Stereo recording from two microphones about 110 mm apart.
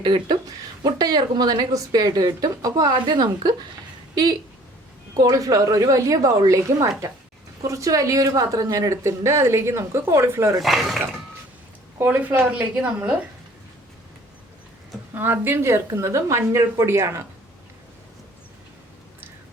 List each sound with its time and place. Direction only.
0.0 s a woman's voice: 45° right (ahead or behind); by 10.6 s 25° right (ahead or behind)
10.6 s speech: centre (ahead or behind)
11.9 s a woman's voice: 15° right (ahead or behind)
15.1 s a woman's voice: 20° right (ahead or behind)